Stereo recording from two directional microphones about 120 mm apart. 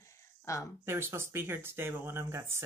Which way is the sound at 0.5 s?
25° left (ahead or behind).